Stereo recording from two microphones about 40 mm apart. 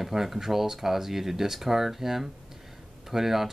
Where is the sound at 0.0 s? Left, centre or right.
Centre.